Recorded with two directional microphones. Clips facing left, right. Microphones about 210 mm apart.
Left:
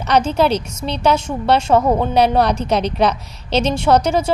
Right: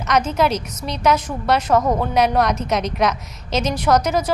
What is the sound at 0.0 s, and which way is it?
A woman's voice, 30° left (ahead or behind).